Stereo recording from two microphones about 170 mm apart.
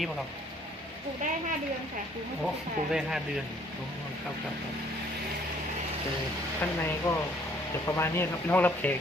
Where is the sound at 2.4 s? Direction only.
5° right (ahead or behind).